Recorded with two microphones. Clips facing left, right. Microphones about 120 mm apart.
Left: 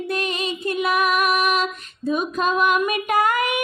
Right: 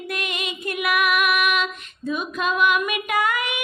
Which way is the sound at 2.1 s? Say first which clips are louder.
Left 3 dB; 40° left (ahead or behind).